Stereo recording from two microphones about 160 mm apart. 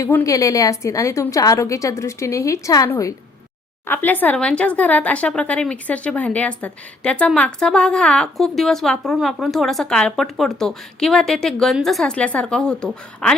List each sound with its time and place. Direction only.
0.0 s a woman's voice: 15° left (ahead or behind)